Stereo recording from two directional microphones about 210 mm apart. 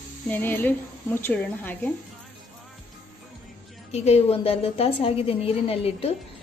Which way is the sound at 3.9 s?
30° left (ahead or behind).